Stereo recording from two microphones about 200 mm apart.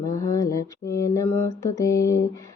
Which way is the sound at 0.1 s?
15° left (ahead or behind).